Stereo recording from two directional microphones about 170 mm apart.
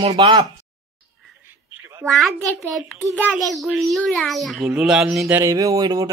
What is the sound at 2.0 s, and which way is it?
Speech, 5° left (ahead or behind).